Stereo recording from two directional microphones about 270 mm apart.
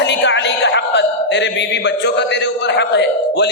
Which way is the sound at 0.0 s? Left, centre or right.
Left.